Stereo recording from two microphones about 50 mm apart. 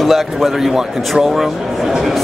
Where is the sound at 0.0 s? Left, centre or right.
Centre.